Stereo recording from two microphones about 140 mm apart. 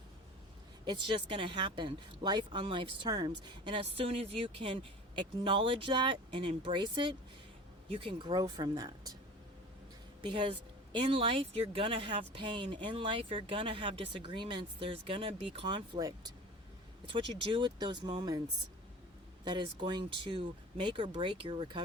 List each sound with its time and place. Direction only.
0.9 s speech: 35° right (ahead or behind)
10.2 s speech: 35° right (ahead or behind)
19.5 s speech: 35° right (ahead or behind)